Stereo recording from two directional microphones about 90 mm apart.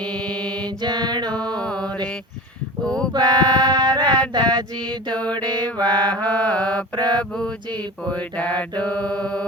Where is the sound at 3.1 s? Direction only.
50° right (ahead or behind).